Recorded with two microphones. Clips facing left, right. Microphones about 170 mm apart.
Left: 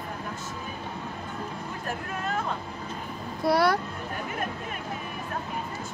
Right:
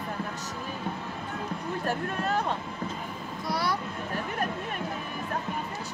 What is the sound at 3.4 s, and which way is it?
Speech, 60° left (ahead or behind).